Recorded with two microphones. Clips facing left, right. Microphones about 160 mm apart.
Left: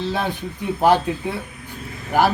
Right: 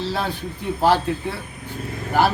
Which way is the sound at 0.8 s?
15° left (ahead or behind).